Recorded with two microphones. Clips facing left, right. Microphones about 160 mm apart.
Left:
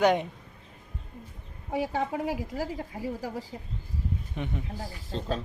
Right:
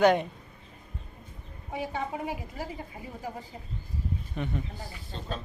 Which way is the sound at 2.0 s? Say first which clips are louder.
Left 4 dB; 85° left.